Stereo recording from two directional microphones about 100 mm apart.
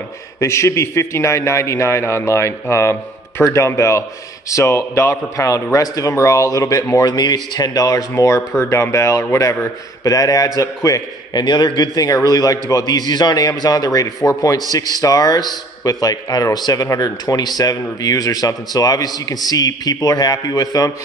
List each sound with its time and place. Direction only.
0.4 s a man's voice: 30° left (ahead or behind)
11.4 s a man's voice: 50° left (ahead or behind)